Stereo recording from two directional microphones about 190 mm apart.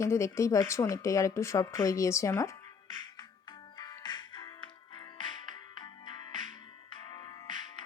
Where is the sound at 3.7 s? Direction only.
20° left (ahead or behind).